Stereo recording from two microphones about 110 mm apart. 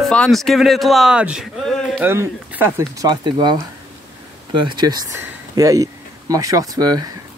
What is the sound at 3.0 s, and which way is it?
Speech, 45° right (ahead or behind).